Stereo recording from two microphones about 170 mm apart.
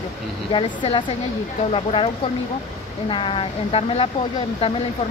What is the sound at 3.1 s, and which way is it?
Speech, 30° left (ahead or behind).